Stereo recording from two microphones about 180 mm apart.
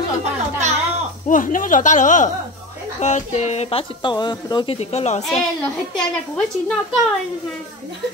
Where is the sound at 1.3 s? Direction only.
45° left (ahead or behind); by 4.7 s 25° left (ahead or behind).